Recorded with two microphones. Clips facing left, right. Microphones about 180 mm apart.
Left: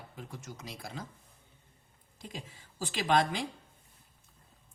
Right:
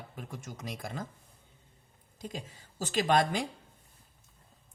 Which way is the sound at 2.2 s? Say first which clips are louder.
Right 4 dB; 40° right (ahead or behind).